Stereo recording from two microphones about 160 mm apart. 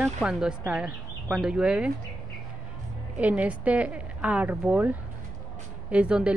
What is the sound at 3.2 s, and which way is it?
A woman's voice, 10° right (ahead or behind).